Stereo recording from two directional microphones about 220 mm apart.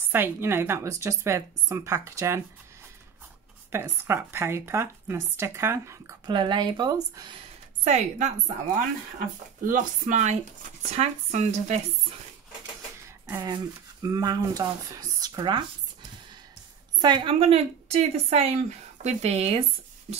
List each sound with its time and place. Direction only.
0.1 s speech: 10° right (ahead or behind)
3.7 s speech: 10° right (ahead or behind)
7.8 s speech: 30° right (ahead or behind)
9.7 s speech: 35° right (ahead or behind)
13.3 s speech: 20° right (ahead or behind)
17.0 s a woman's voice: 20° right (ahead or behind)